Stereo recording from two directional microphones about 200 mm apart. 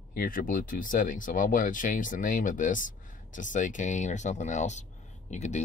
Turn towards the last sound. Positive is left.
turn(degrees=35)  # may be behind; listen again after turning